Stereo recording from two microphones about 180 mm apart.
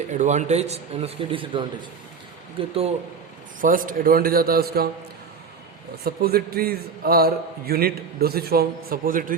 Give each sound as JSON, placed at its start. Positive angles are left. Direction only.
{"t": 0.1, "sound": "speech", "side_deg": -40}
{"t": 3.6, "sound": "a man's voice", "side_deg": -50}
{"t": 6.1, "sound": "a man's voice", "side_deg": -60}